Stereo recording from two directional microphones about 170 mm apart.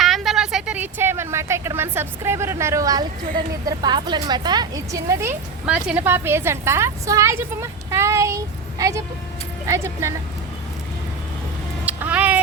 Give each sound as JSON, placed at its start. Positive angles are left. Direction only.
{"t": 0.0, "sound": "a woman's voice", "side_deg": 0}
{"t": 11.9, "sound": "vehicle", "side_deg": -10}